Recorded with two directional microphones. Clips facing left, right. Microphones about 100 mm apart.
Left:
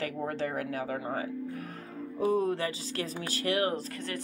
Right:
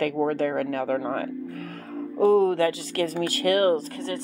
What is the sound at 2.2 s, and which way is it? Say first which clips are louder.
Speech: right 9 dB; 75° right (ahead or behind).